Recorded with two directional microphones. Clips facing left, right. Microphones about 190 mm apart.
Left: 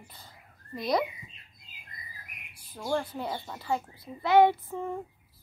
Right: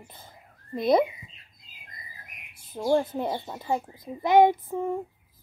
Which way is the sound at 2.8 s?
20° right (ahead or behind).